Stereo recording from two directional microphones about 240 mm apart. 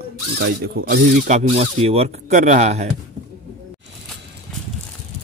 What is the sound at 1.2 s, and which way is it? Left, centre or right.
Speech, right.